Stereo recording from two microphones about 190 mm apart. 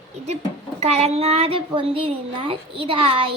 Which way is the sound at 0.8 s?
35° right (ahead or behind).